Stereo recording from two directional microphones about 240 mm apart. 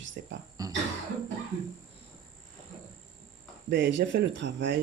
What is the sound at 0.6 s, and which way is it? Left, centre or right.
Cough, centre.